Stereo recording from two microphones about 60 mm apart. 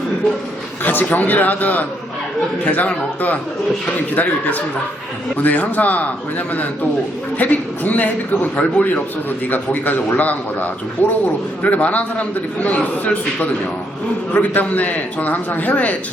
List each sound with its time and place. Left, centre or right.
0.9 s a man's voice: left
7.3 s a man's voice: left